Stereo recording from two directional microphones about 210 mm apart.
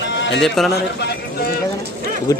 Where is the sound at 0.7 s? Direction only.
50° left (ahead or behind).